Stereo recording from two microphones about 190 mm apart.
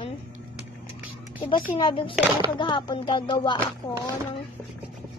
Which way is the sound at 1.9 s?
25° left (ahead or behind).